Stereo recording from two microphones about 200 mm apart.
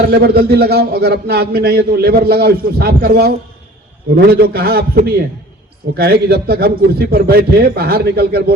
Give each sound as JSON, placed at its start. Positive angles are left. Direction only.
{"t": 0.0, "sound": "a man's voice", "side_deg": -50}